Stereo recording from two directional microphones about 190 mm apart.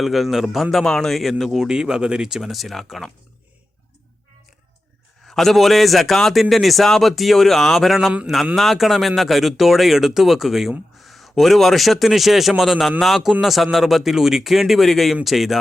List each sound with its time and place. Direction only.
0.0 s a man's voice: centre (ahead or behind)
5.2 s a man's voice: centre (ahead or behind)